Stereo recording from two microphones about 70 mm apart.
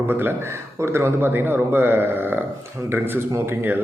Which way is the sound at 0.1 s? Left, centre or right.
Right.